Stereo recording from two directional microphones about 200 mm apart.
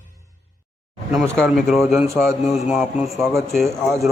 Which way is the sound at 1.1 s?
Centre (ahead or behind).